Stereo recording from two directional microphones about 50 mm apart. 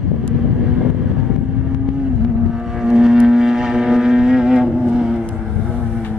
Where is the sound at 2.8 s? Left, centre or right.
Centre.